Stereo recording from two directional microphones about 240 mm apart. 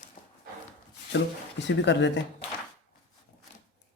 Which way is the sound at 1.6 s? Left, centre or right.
Left.